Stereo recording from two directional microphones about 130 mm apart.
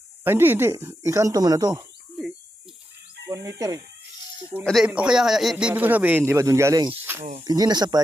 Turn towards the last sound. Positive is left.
turn(degrees=-30)  # may be behind; listen again after turning